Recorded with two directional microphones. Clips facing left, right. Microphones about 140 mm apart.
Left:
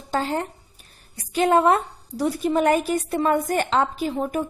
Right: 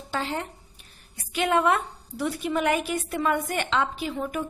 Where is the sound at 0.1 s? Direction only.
40° left (ahead or behind).